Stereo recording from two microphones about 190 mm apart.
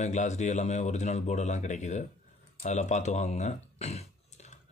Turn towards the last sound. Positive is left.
turn(degrees=35)  # may be behind; listen again after turning